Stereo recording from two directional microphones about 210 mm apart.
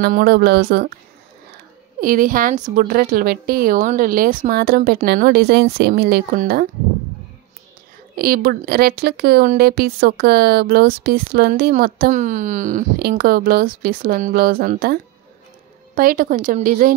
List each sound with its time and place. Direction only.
0.0 s speech: 45° right (ahead or behind)
2.0 s speech: 40° right (ahead or behind)
8.2 s a woman's voice: 45° right (ahead or behind)